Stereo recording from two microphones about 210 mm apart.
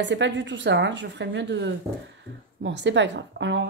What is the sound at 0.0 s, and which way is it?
A woman's voice, 55° right (ahead or behind).